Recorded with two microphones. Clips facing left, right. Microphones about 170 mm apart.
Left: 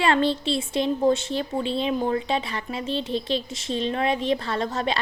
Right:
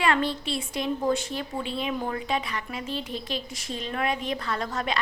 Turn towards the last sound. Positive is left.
turn(degrees=25)  # may be behind; listen again after turning